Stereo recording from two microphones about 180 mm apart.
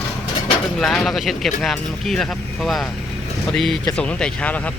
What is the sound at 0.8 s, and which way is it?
Speech, centre (ahead or behind).